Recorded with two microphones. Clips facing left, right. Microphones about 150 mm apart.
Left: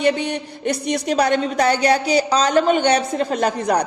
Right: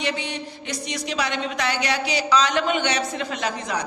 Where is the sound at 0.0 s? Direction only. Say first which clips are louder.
Left 8 dB; 50° left (ahead or behind).